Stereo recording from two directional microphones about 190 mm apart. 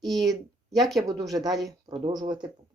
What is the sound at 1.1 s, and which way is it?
Speech, 20° right (ahead or behind).